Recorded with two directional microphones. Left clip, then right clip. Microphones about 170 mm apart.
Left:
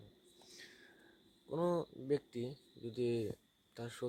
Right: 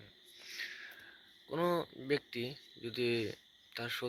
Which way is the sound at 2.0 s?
10° left (ahead or behind).